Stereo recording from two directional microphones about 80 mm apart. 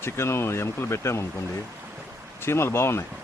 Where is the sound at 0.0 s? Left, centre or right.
Left.